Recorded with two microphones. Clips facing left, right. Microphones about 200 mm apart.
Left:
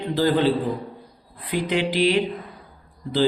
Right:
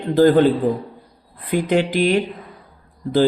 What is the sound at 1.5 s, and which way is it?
Speech, 50° right (ahead or behind).